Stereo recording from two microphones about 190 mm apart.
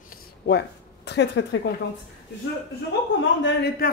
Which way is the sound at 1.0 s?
65° left (ahead or behind).